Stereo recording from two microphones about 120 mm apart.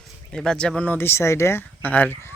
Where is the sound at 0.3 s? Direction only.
5° left (ahead or behind).